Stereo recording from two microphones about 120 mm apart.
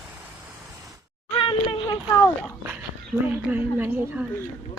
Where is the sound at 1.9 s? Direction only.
25° left (ahead or behind).